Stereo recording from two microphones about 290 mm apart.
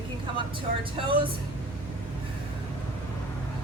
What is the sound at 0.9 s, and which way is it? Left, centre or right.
Speech, centre.